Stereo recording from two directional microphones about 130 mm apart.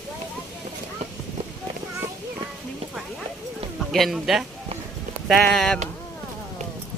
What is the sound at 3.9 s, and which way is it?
A man's voice, centre (ahead or behind).